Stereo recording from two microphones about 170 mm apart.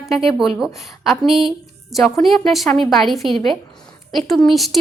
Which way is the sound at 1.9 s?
Centre (ahead or behind).